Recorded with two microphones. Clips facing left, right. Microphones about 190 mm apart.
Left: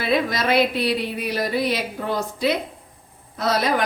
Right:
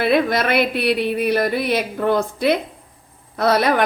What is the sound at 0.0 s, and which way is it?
A woman's voice, 60° right (ahead or behind).